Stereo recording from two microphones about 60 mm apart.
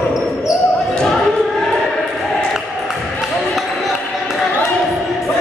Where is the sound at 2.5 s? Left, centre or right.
Centre.